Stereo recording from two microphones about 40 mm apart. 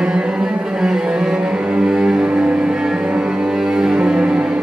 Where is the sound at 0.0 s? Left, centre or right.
Centre.